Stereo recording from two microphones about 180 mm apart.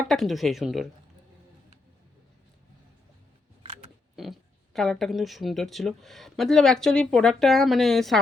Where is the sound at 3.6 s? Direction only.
30° right (ahead or behind).